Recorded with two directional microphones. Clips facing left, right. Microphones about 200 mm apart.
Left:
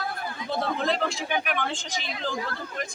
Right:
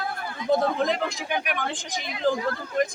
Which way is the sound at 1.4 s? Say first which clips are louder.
Even; 15° right (ahead or behind).